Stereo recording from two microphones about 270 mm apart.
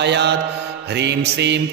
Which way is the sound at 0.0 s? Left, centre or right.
Right.